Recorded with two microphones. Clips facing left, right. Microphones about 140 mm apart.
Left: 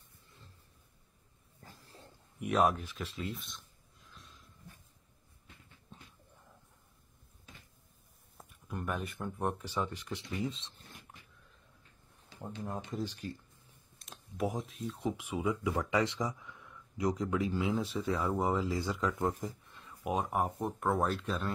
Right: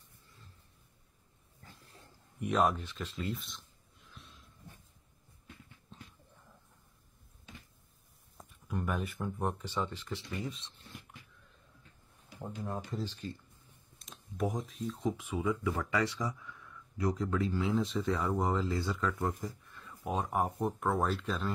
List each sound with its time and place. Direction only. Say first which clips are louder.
1.6 s wild animals: left 2 dB; 35° left (ahead or behind)
2.4 s speech: left 1 dB; centre (ahead or behind)
8.4 s speech: right 3 dB; centre (ahead or behind); by 10.7 s 25° left (ahead or behind)
12.6 s speech: left 1 dB; 15° left (ahead or behind)
13.9 s speech: right 1 dB; centre (ahead or behind)
15.0 s speech: even; 10° left (ahead or behind)
20.2 s speech: right 1 dB; centre (ahead or behind)